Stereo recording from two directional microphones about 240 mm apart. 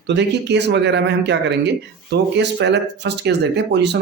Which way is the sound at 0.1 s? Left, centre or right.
Right.